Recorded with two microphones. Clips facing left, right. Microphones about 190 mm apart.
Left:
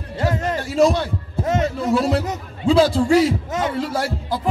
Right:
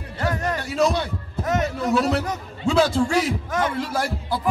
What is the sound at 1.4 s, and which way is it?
A man's voice, 25° left (ahead or behind).